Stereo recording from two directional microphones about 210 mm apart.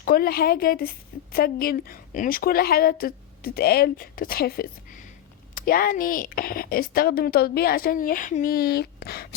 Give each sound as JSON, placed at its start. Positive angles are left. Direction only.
{"t": 0.0, "sound": "a woman's voice", "side_deg": 45}